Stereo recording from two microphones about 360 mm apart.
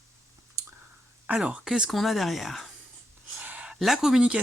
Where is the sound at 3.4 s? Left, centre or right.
Centre.